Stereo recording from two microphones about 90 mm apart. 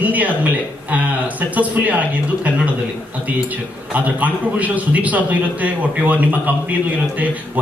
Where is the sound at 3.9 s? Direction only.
15° right (ahead or behind).